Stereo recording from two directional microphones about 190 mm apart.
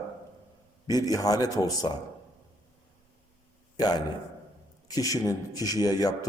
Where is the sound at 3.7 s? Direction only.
20° left (ahead or behind).